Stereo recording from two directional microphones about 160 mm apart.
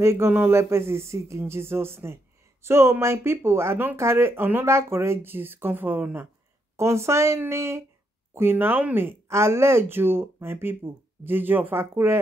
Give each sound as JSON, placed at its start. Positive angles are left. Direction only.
{"t": 0.0, "sound": "speech", "side_deg": -15}